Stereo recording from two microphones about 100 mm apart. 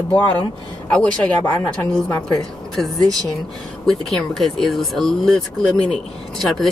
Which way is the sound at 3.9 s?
5° left (ahead or behind).